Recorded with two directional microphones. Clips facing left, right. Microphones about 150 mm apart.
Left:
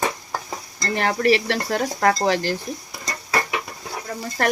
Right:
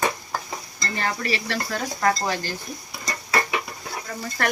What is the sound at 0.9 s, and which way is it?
Speech, 70° left (ahead or behind).